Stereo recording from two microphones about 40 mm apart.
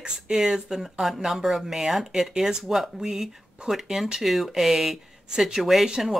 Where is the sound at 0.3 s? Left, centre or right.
Centre.